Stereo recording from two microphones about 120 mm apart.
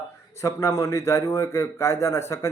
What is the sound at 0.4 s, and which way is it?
A man's voice, 25° left (ahead or behind).